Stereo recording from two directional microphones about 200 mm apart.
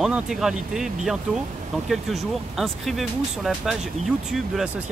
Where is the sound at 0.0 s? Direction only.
Centre (ahead or behind).